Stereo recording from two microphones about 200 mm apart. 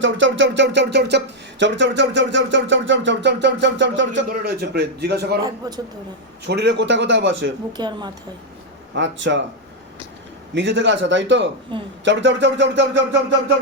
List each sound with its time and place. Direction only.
0.0 s speech: 70° right (ahead or behind)
4.3 s speech: 50° right (ahead or behind)
5.4 s a man's voice: 20° right (ahead or behind)
6.4 s speech: 55° right (ahead or behind)
7.7 s a man's voice: 20° right (ahead or behind)
9.0 s speech: 65° right (ahead or behind)
10.5 s speech: 65° right (ahead or behind)